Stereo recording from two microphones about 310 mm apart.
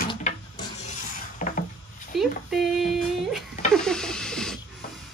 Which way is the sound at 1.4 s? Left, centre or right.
Left.